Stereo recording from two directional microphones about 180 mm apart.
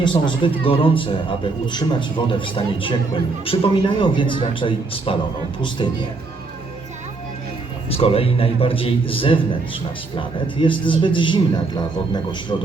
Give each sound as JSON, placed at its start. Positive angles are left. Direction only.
{"t": 0.0, "sound": "a man's voice", "side_deg": 25}
{"t": 7.9, "sound": "a man's voice", "side_deg": 35}